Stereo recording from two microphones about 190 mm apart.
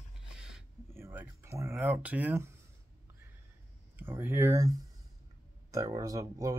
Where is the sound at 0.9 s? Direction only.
10° right (ahead or behind).